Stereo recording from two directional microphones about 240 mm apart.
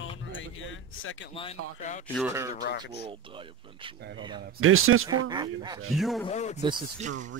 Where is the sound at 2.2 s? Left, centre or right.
Centre.